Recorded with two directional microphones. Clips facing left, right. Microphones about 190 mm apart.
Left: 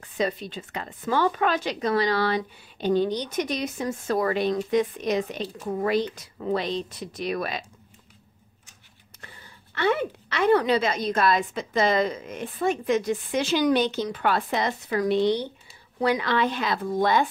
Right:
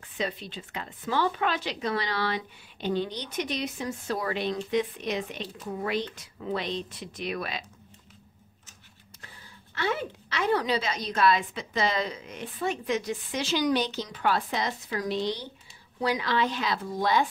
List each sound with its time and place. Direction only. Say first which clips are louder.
0.2 s a woman's voice: left 6 dB; 45° left (ahead or behind)
9.8 s a woman's voice: left 6 dB; 60° left (ahead or behind)